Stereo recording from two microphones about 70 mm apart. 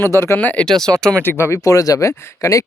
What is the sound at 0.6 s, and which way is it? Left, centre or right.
Speech, centre.